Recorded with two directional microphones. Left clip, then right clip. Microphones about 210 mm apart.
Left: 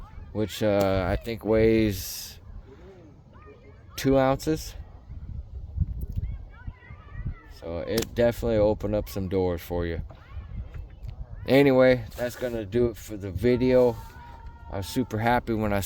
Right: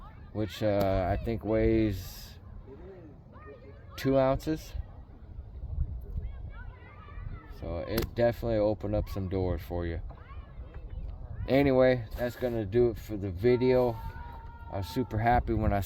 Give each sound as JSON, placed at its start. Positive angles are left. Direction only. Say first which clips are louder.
{"t": 0.3, "sound": "speech", "louder": "left 5 dB", "side_deg": 55}
{"t": 3.9, "sound": "speech", "louder": "left 4 dB", "side_deg": 55}
{"t": 7.6, "sound": "speech", "louder": "left 5 dB", "side_deg": 60}
{"t": 11.4, "sound": "speech", "louder": "left 5 dB", "side_deg": 60}